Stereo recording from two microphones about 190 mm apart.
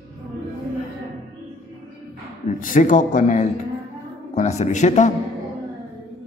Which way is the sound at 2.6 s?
45° left (ahead or behind).